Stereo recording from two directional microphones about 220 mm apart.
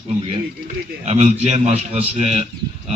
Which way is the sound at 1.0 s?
25° right (ahead or behind).